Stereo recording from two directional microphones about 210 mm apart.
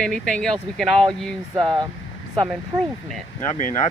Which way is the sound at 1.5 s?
20° right (ahead or behind).